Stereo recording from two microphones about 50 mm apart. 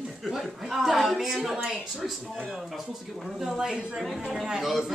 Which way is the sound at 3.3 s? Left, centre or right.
Centre.